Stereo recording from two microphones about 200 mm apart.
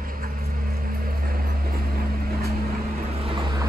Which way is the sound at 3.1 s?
30° right (ahead or behind).